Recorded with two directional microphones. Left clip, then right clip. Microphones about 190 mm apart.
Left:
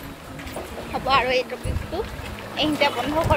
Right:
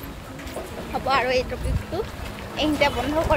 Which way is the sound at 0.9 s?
5° right (ahead or behind).